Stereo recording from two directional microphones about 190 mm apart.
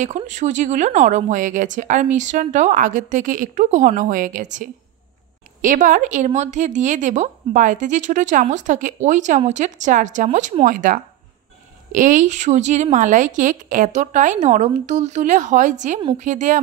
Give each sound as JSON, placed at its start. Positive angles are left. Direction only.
{"t": 0.0, "sound": "speech", "side_deg": -40}